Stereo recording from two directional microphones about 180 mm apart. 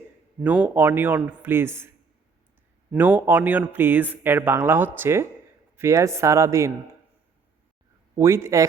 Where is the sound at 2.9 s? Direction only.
10° right (ahead or behind).